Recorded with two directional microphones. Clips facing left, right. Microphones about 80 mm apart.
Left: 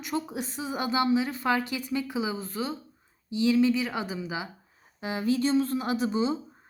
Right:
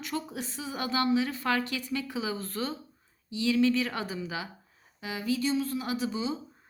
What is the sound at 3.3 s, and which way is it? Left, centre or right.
A woman's voice, left.